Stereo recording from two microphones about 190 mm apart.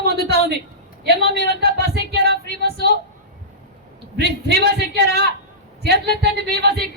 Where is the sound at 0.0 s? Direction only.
60° right (ahead or behind).